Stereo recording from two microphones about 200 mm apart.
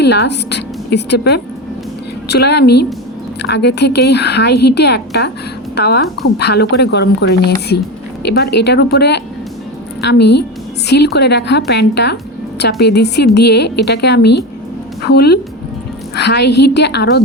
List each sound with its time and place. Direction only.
0.0 s a woman's voice: 55° left (ahead or behind)